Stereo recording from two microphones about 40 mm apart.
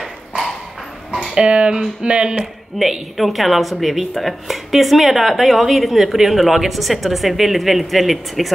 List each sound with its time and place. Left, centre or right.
1.3 s speech: right
2.8 s speech: centre